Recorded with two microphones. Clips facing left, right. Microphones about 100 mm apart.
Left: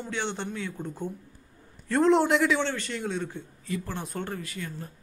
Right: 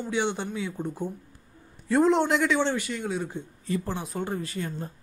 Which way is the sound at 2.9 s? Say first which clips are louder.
Right 1 dB; 5° right (ahead or behind).